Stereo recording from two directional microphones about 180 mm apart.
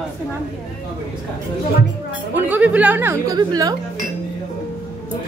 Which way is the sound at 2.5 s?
10° right (ahead or behind).